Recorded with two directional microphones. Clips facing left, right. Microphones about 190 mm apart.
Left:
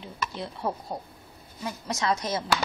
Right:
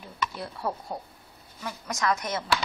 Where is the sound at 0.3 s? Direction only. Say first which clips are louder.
Left 1 dB; 20° left (ahead or behind).